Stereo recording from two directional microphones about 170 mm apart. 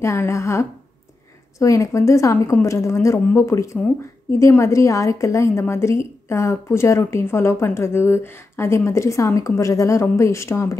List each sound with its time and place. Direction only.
0.0 s a woman's voice: 15° left (ahead or behind)